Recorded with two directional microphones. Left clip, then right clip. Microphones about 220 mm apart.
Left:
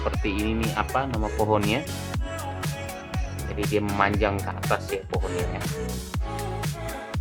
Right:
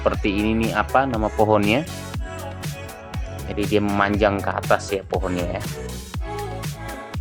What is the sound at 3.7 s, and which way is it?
Speech, 35° right (ahead or behind).